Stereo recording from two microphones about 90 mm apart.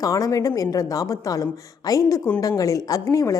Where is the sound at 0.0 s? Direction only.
40° left (ahead or behind).